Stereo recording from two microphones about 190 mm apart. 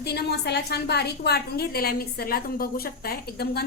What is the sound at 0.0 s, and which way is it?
A woman's voice, 60° left (ahead or behind).